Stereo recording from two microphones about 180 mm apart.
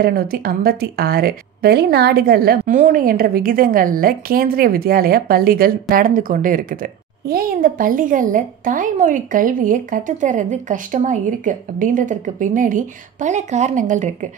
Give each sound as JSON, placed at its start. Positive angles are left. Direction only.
{"t": 0.0, "sound": "a woman's voice", "side_deg": -55}